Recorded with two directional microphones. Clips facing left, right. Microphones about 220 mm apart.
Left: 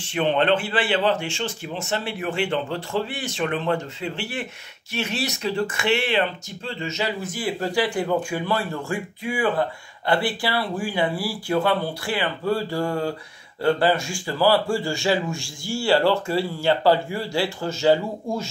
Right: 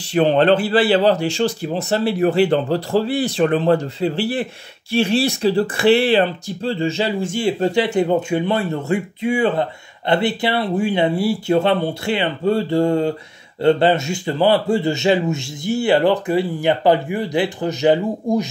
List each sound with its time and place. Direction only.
0.0 s speech: 35° right (ahead or behind); by 18.5 s 20° right (ahead or behind)